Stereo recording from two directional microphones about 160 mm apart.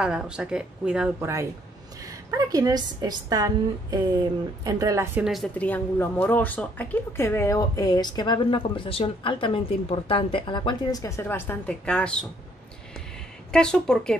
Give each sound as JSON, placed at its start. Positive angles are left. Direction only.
{"t": 0.0, "sound": "speech", "side_deg": -5}
{"t": 1.2, "sound": "a woman's voice", "side_deg": -20}
{"t": 5.2, "sound": "speech", "side_deg": 0}
{"t": 5.6, "sound": "speech", "side_deg": 10}
{"t": 13.5, "sound": "speech", "side_deg": 5}